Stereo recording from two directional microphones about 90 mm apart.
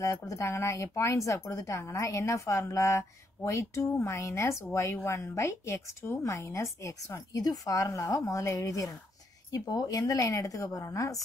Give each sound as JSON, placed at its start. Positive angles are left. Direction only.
{"t": 0.0, "sound": "speech", "side_deg": 35}